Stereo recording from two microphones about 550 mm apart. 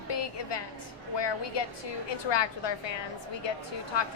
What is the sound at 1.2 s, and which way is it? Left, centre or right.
A woman's voice, left.